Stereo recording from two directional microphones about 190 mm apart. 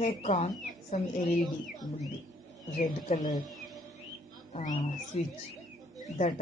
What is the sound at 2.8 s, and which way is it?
Speech, 40° left (ahead or behind).